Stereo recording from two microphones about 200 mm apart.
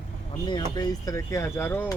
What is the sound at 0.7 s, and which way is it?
Speech, 15° left (ahead or behind).